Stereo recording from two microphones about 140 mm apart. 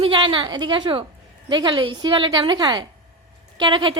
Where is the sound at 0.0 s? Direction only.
35° right (ahead or behind).